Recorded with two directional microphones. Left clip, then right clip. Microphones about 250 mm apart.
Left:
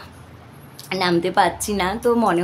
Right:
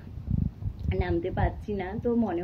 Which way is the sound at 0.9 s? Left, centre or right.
Centre.